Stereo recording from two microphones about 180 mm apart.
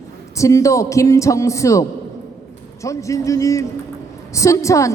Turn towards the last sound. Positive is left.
turn(degrees=15)  # may be behind; listen again after turning